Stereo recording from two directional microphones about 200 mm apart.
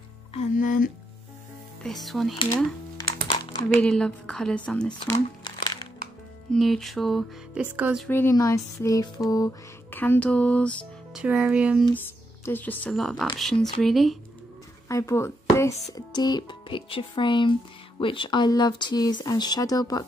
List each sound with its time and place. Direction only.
0.3 s music: 40° left (ahead or behind)
1.8 s speech: centre (ahead or behind)
3.8 s speech: 5° left (ahead or behind)
4.9 s music: 20° left (ahead or behind)
6.5 s speech: centre (ahead or behind)
8.1 s speech: 15° left (ahead or behind)
9.3 s music: 15° left (ahead or behind)
11.2 s speech: 5° right (ahead or behind)
12.4 s speech: 10° left (ahead or behind)
14.9 s speech: 15° left (ahead or behind)